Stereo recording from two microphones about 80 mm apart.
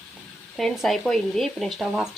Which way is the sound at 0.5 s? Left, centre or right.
Centre.